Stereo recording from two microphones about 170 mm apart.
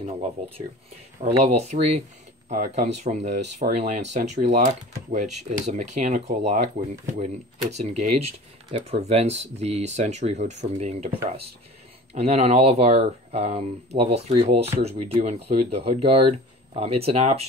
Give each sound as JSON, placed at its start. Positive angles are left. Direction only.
{"t": 0.0, "sound": "speech", "side_deg": -35}
{"t": 7.7, "sound": "speech", "side_deg": -40}
{"t": 12.1, "sound": "speech", "side_deg": -40}